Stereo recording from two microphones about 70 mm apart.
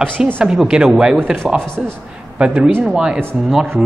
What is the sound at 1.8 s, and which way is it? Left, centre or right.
Speech, centre.